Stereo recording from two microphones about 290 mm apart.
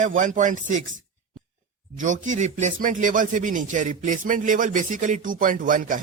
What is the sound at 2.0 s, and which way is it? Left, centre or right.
Speech, right.